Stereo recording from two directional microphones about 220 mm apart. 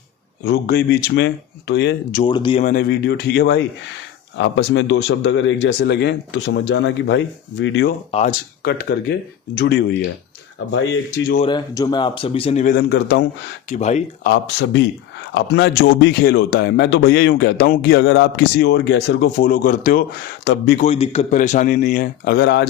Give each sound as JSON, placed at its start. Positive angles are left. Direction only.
{"t": 0.4, "sound": "a man's voice", "side_deg": 45}
{"t": 2.2, "sound": "a man's voice", "side_deg": 20}
{"t": 8.1, "sound": "a man's voice", "side_deg": 30}
{"t": 8.6, "sound": "a man's voice", "side_deg": 45}
{"t": 11.4, "sound": "speech", "side_deg": 20}
{"t": 12.7, "sound": "a man's voice", "side_deg": 50}
{"t": 13.7, "sound": "a man's voice", "side_deg": 30}
{"t": 14.3, "sound": "a man's voice", "side_deg": 55}
{"t": 20.8, "sound": "a man's voice", "side_deg": 25}